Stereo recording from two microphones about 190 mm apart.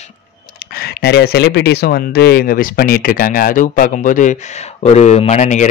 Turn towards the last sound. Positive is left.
turn(degrees=40)  # may be behind; listen again after turning